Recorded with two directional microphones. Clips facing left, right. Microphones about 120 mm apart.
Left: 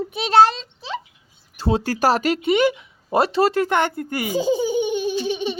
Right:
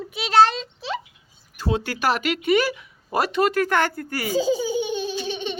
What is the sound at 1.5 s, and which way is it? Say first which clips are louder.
Speech: left 4 dB; 30° left (ahead or behind).